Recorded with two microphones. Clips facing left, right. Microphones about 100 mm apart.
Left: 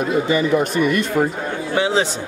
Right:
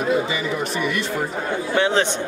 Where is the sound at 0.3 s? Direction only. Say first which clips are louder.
Left 7 dB; 45° left (ahead or behind).